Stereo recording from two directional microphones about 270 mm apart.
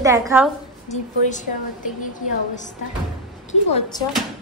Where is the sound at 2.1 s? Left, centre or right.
Left.